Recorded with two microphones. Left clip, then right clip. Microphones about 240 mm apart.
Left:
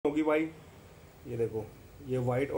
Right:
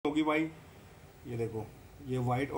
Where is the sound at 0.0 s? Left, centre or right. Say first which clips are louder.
Left 2 dB; right.